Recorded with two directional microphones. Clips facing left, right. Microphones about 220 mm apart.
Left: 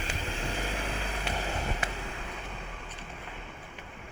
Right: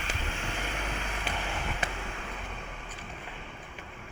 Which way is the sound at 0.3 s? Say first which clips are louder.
Left 3 dB; 35° left (ahead or behind).